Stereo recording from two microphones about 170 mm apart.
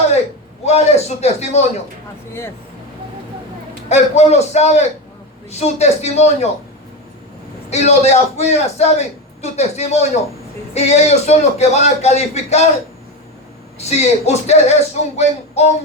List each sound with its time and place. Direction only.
0.6 s a man's voice: 40° left (ahead or behind)
3.8 s a man's voice: 40° left (ahead or behind)
7.7 s a man's voice: 40° left (ahead or behind)
13.7 s a man's voice: 40° left (ahead or behind)